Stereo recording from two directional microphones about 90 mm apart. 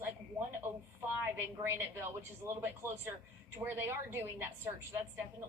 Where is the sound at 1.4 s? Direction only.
30° right (ahead or behind).